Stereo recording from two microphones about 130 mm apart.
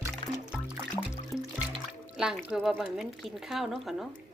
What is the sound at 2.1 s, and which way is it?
Speech, 5° right (ahead or behind).